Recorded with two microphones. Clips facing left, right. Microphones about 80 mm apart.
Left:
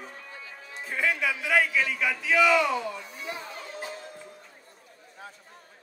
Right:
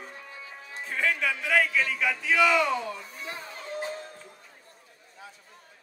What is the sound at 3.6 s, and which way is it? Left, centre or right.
Music, right.